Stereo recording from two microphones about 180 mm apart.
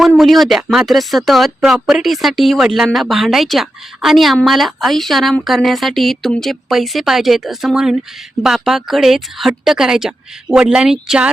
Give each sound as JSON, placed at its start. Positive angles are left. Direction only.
{"t": 0.0, "sound": "speech", "side_deg": 0}